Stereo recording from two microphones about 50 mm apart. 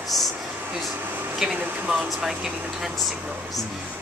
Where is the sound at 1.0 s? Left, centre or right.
Right.